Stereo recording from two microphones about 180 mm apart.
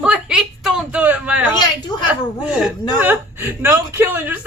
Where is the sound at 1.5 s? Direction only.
25° left (ahead or behind).